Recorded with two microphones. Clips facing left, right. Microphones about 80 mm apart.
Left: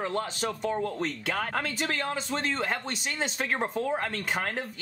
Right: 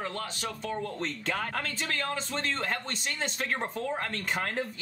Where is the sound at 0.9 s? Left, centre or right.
Centre.